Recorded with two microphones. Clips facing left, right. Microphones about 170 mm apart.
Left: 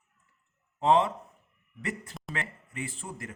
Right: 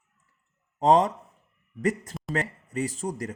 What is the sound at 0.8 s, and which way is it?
Speech, 40° right (ahead or behind).